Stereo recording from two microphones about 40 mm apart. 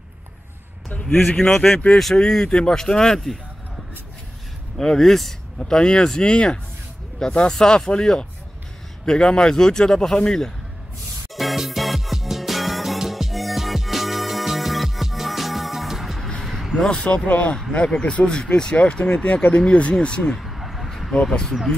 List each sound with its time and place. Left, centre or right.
1.2 s speech: left
1.5 s speech: centre
4.7 s speech: centre
5.7 s speech: left
11.3 s music: centre
16.7 s speech: centre
17.0 s speech: left
20.3 s a sound: centre
21.1 s speech: centre